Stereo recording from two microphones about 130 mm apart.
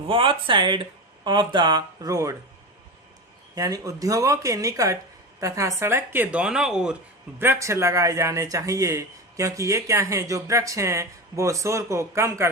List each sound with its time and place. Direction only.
0.1 s speech: 45° right (ahead or behind); by 2.3 s 25° right (ahead or behind)
3.5 s a woman's voice: 30° right (ahead or behind); by 6.9 s 5° right (ahead or behind)
7.3 s speech: 20° right (ahead or behind)